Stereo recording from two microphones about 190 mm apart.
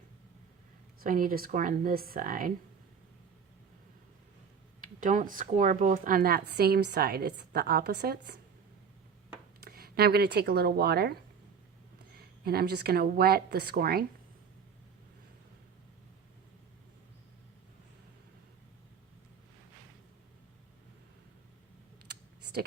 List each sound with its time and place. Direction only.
1.0 s speech: 45° right (ahead or behind)
4.8 s speech: 45° right (ahead or behind)
9.6 s a woman's voice: 55° right (ahead or behind)